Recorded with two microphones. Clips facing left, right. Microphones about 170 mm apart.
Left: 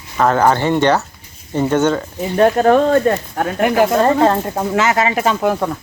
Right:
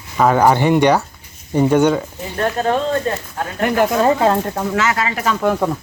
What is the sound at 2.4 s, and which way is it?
Speech, 40° left (ahead or behind).